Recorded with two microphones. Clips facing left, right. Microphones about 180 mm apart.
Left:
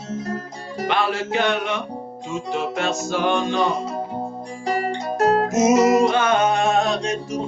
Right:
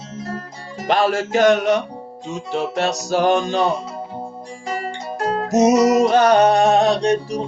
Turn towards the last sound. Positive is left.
turn(degrees=-35)  # may be behind; listen again after turning